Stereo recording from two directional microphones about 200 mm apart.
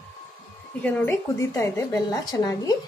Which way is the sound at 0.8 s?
10° left (ahead or behind).